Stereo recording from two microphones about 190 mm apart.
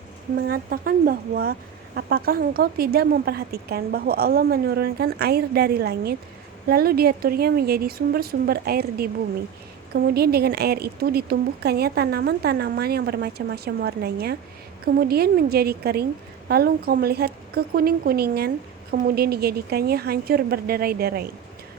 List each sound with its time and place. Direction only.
0.3 s speech: 55° right (ahead or behind)